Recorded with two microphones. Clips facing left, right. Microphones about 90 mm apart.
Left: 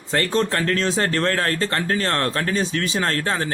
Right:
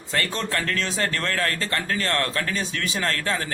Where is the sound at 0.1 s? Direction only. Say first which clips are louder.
Left 6 dB; 35° left (ahead or behind).